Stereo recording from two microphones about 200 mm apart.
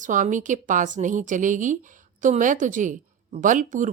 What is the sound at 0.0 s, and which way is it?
A woman's voice, 40° right (ahead or behind).